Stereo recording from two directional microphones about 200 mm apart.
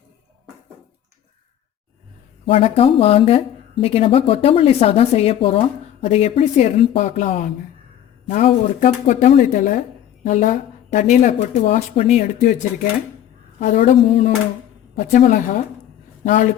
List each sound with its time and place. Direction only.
2.5 s speech: 30° left (ahead or behind)
13.6 s speech: 40° left (ahead or behind)